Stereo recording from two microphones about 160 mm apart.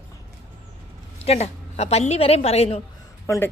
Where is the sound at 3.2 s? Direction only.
20° left (ahead or behind).